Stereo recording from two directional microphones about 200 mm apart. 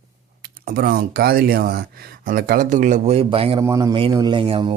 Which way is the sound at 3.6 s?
15° right (ahead or behind).